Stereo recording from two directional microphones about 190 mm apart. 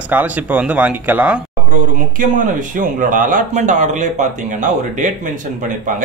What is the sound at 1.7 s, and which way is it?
Speech, 45° right (ahead or behind).